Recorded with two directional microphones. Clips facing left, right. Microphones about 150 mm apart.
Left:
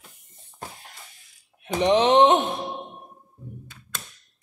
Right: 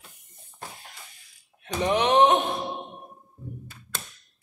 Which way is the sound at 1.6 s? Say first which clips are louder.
Left 5 dB; 25° left (ahead or behind).